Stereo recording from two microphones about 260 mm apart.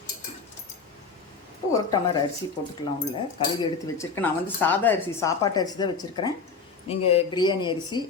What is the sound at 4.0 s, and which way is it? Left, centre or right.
Speech, centre.